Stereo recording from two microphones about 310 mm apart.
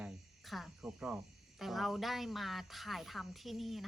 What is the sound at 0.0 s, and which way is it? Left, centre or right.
Speech, centre.